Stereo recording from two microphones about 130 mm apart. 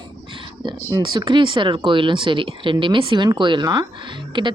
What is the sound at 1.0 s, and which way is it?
A woman's voice, 35° right (ahead or behind).